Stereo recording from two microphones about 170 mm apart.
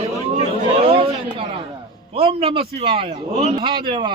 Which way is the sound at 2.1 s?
35° right (ahead or behind).